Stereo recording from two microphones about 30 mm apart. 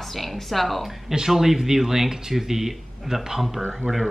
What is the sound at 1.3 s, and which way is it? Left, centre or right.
A woman's voice, centre.